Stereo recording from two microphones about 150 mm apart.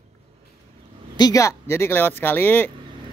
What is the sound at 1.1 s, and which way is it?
A man's voice, 25° left (ahead or behind).